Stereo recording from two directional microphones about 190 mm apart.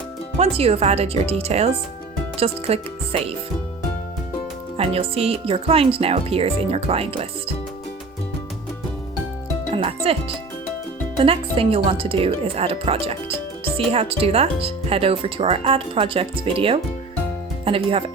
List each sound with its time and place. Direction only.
0.3 s speech: 35° right (ahead or behind)
4.8 s speech: 30° right (ahead or behind)
9.7 s speech: 30° right (ahead or behind)